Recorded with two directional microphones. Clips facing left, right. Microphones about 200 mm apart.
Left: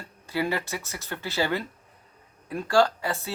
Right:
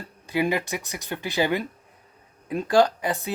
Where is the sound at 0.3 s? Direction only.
15° right (ahead or behind).